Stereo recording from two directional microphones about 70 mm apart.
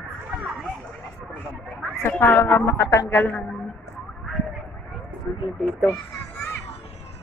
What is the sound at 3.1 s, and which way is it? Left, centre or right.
Speech, left.